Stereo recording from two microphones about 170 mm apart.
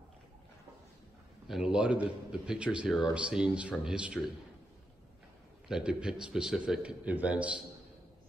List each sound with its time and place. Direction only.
1.5 s a man's voice: 5° right (ahead or behind)
5.7 s a man's voice: 5° right (ahead or behind)